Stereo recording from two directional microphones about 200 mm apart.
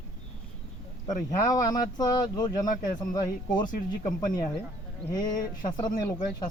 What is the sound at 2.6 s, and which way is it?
A man's voice, 40° left (ahead or behind).